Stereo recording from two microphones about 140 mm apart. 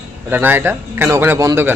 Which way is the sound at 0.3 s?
15° right (ahead or behind).